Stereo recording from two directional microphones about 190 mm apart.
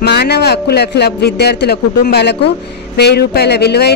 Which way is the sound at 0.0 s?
60° left (ahead or behind).